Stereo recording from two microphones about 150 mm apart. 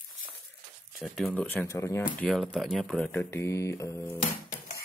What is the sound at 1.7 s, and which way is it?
Speech, 20° left (ahead or behind).